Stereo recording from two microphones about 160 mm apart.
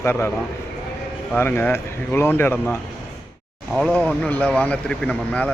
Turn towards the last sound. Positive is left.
turn(degrees=10)  # may be behind; listen again after turning